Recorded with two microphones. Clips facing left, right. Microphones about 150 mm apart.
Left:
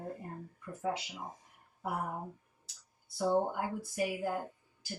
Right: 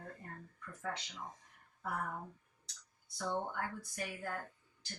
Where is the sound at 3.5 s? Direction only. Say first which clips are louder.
Left 6 dB; 15° left (ahead or behind).